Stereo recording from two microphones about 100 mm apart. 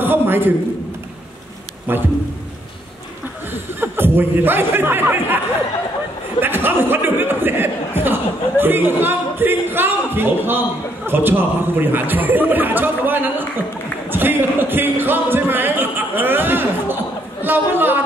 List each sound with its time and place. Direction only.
0.0 s a sound: 20° right (ahead or behind)
1.9 s speech: 20° right (ahead or behind)
3.8 s speech: 20° right (ahead or behind)
6.4 s a man's voice: 20° right (ahead or behind)